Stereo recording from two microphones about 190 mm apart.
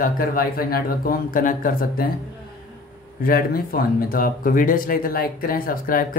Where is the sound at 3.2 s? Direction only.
50° left (ahead or behind).